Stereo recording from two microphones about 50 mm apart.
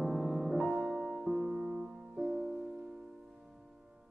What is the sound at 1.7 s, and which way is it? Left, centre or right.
Music, centre.